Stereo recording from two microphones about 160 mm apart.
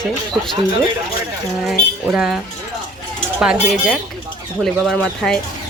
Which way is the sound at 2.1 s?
5° right (ahead or behind).